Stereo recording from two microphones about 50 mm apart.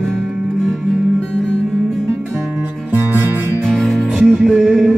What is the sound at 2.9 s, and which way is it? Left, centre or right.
Music, right.